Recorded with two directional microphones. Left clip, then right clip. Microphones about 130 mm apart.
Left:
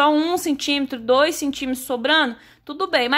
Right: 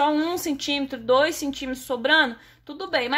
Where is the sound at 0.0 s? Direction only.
45° left (ahead or behind).